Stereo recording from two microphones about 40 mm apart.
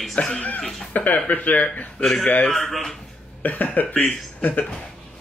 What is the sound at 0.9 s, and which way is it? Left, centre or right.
Speech, left.